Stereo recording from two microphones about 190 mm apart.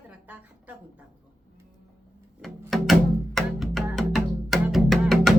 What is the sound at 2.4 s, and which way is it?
Music, centre (ahead or behind).